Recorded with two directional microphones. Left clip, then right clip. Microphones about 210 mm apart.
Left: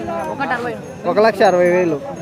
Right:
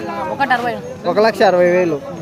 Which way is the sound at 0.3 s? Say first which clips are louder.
Right 8 dB; 45° right (ahead or behind).